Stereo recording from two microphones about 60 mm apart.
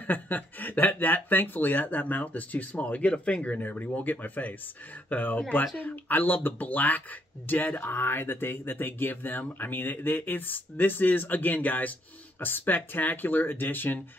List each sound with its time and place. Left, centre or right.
0.0 s speech: left